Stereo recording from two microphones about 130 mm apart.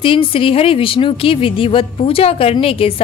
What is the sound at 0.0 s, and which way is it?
A woman's voice, 45° left (ahead or behind).